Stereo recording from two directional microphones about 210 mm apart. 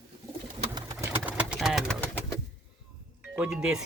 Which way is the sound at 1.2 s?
5° right (ahead or behind).